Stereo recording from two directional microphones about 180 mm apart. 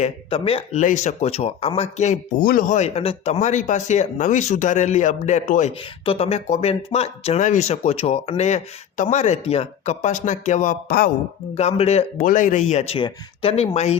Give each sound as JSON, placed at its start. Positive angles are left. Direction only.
{"t": 0.0, "sound": "speech", "side_deg": 30}
{"t": 11.5, "sound": "speech", "side_deg": 35}